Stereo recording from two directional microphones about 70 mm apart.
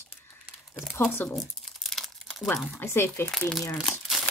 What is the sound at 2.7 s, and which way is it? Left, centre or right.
Speech, left.